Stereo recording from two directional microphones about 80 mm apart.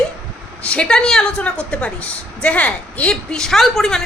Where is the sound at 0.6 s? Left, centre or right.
Centre.